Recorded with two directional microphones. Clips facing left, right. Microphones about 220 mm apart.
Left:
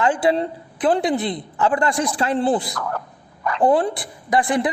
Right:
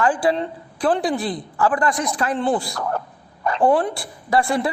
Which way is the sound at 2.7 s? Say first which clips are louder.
Right 2 dB; 30° right (ahead or behind).